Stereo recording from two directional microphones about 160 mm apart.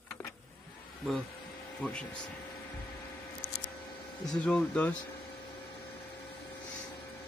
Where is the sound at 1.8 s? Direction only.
5° left (ahead or behind).